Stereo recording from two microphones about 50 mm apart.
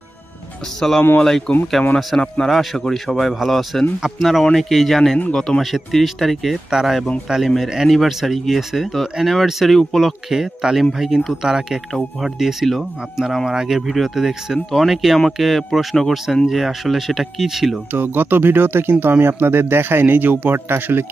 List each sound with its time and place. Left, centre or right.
0.8 s speech: centre
17.9 s a man's voice: right